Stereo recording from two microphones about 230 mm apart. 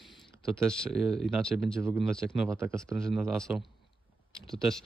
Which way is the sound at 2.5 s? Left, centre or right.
Centre.